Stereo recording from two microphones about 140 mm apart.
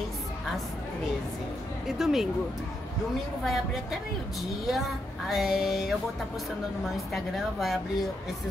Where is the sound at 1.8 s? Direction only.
Centre (ahead or behind).